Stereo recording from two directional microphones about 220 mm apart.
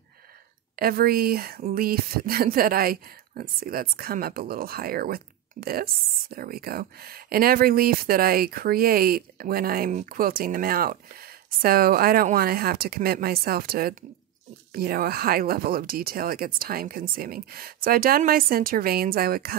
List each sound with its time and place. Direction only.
0.7 s speech: 45° right (ahead or behind)